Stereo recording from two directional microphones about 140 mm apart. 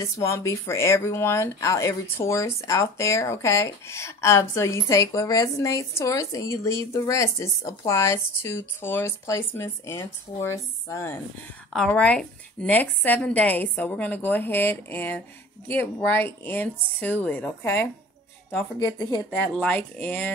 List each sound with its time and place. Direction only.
0.0 s speech: 20° left (ahead or behind)
11.7 s a woman's voice: 5° left (ahead or behind)
18.9 s speech: 30° left (ahead or behind)
19.4 s a woman's voice: 10° left (ahead or behind)